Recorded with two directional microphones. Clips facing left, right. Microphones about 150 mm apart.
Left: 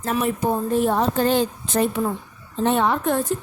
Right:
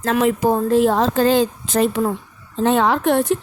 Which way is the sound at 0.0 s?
90° right.